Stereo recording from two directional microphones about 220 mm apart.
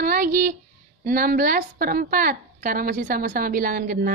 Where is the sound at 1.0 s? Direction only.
40° right (ahead or behind).